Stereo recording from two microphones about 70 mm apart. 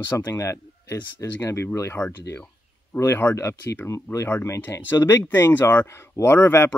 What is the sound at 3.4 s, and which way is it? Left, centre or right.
Speech, left.